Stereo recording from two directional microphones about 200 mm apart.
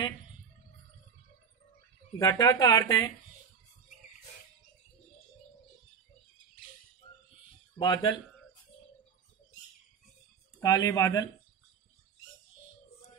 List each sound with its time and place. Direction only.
2.1 s speech: 15° left (ahead or behind)
7.8 s speech: 20° left (ahead or behind)
10.6 s speech: 20° left (ahead or behind)